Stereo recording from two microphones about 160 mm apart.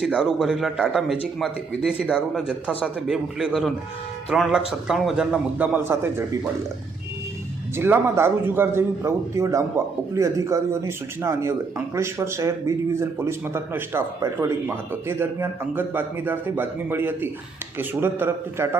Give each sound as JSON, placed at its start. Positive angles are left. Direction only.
{"t": 0.0, "sound": "a man's voice", "side_deg": -5}
{"t": 7.8, "sound": "a man's voice", "side_deg": -15}